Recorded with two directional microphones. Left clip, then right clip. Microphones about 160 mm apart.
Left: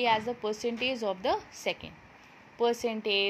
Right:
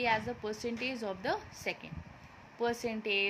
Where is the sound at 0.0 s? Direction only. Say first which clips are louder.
Left 5 dB; 20° left (ahead or behind).